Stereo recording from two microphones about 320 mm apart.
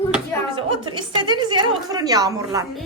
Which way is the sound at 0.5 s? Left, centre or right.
Centre.